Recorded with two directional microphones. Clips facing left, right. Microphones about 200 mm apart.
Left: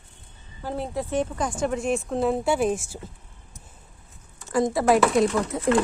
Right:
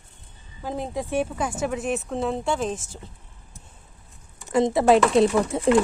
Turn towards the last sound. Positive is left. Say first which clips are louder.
# right 3 dB
turn(degrees=-30)  # may be behind; listen again after turning